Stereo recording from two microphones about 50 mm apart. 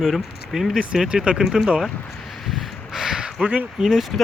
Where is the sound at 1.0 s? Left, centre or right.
Centre.